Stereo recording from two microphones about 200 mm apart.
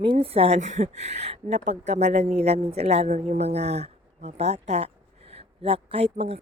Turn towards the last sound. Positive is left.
turn(degrees=-30)  # may be behind; listen again after turning